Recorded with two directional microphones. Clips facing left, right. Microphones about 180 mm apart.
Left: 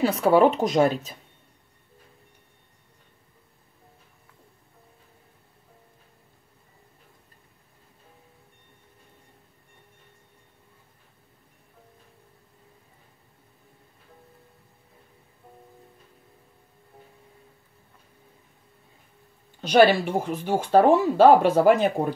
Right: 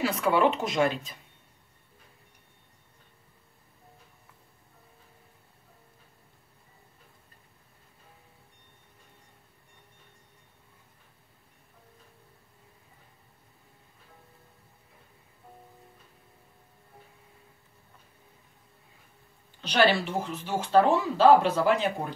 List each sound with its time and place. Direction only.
0.2 s speech: 40° left (ahead or behind)
19.6 s speech: 45° left (ahead or behind)